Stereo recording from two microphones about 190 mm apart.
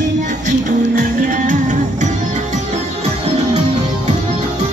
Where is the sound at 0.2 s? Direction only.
40° right (ahead or behind).